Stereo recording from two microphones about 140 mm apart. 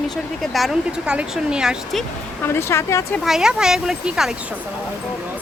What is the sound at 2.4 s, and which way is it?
Speech, 20° left (ahead or behind).